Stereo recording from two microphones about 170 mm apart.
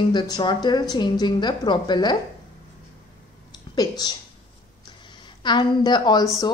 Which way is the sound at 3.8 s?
25° left (ahead or behind).